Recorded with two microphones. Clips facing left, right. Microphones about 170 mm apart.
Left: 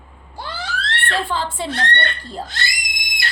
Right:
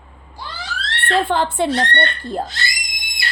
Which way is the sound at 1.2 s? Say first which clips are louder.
Right 6 dB; 55° right (ahead or behind).